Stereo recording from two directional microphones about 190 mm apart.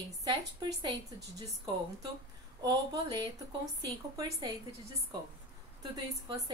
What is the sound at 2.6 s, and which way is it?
Speech, 20° right (ahead or behind).